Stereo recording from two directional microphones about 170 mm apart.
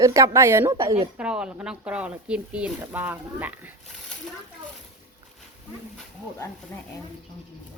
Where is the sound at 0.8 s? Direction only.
35° right (ahead or behind).